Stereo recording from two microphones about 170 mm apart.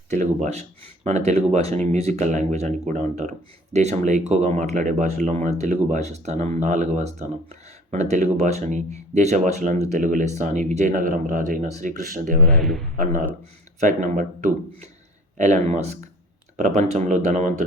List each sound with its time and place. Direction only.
0.1 s speech: 45° right (ahead or behind)
13.7 s speech: 50° right (ahead or behind)
15.4 s speech: 45° right (ahead or behind)